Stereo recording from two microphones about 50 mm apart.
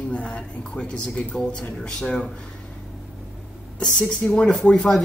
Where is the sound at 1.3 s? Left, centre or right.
Left.